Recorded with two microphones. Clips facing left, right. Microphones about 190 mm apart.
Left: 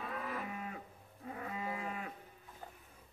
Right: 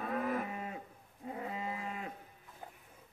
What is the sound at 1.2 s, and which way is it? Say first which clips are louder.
Moo: right 2 dB; 25° right (ahead or behind).